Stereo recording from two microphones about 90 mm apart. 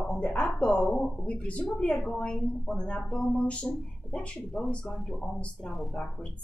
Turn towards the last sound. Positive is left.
turn(degrees=10)  # may be behind; listen again after turning